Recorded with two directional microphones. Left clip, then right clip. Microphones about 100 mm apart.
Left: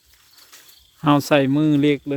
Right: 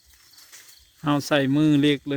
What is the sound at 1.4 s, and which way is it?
Speech, 15° left (ahead or behind).